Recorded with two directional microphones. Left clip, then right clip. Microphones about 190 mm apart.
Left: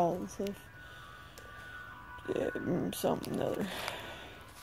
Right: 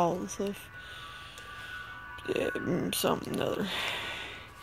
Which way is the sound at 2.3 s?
5° right (ahead or behind).